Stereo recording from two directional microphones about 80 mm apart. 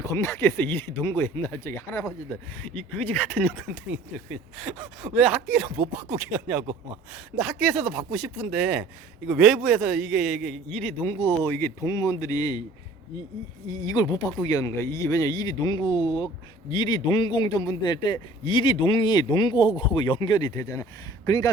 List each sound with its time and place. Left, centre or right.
0.0 s speech: left
1.7 s speech: left
2.3 s speech: left
4.3 s speech: centre
5.7 s speech: right
7.3 s speech: centre
10.8 s speech: left
11.8 s speech: left
13.7 s speech: left
14.6 s speech: left
20.5 s speech: left